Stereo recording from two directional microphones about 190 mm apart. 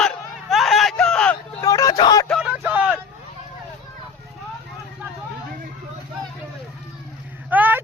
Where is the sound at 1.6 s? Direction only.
20° left (ahead or behind).